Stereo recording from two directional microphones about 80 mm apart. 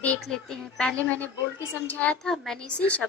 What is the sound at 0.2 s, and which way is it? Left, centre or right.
Speech, centre.